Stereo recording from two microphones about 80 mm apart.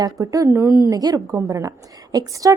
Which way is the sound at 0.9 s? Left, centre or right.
Right.